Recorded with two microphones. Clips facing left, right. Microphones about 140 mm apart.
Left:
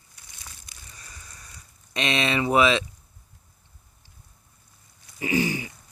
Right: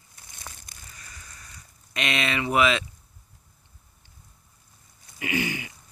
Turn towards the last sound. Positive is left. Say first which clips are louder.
# left 4 dB
turn(degrees=35)  # may be behind; listen again after turning